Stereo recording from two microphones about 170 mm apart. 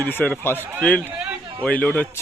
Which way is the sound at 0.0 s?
10° left (ahead or behind).